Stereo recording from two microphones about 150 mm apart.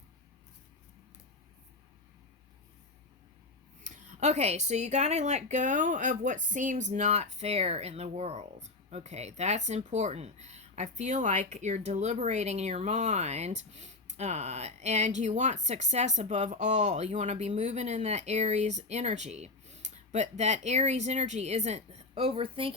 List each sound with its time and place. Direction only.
3.8 s speech: 55° right (ahead or behind); by 22.7 s 35° right (ahead or behind)